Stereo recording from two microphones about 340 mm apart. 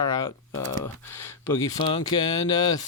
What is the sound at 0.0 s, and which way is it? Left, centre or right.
Typing, centre.